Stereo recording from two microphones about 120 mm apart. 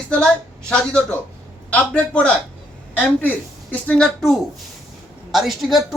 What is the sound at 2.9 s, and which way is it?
A woman's voice, 15° left (ahead or behind).